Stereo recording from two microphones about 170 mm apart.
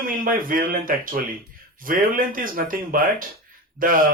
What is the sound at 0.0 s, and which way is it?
Speech, 55° right (ahead or behind).